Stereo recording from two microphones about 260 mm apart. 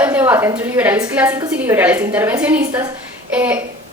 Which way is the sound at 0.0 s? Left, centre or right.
Centre.